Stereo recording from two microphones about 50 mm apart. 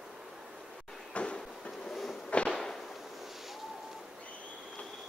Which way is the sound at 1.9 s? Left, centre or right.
Centre.